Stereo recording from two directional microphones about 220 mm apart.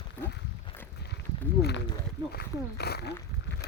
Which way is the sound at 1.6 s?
50° left (ahead or behind).